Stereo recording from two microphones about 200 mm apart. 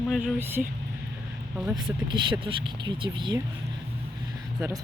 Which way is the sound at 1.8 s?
25° right (ahead or behind).